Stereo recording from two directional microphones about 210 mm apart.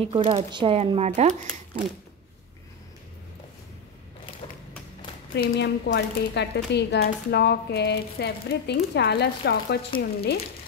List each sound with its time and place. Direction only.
0.0 s speech: 25° right (ahead or behind)
4.4 s a sound: 25° left (ahead or behind)
5.3 s speech: 55° left (ahead or behind)